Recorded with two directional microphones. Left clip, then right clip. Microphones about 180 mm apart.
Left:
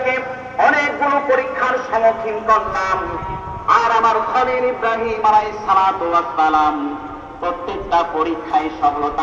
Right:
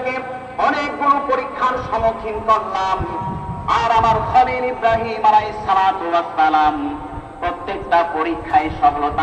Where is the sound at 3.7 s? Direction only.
60° right (ahead or behind).